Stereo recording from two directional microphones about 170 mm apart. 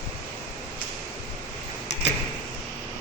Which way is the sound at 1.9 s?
90° left.